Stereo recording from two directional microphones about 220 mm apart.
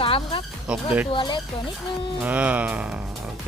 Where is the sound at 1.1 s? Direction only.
20° left (ahead or behind).